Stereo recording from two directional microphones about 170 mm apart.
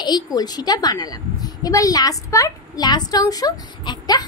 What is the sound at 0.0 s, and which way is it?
A woman's voice, 25° left (ahead or behind).